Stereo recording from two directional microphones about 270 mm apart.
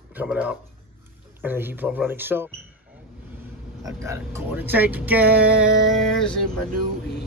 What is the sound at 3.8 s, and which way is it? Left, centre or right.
Speech, centre.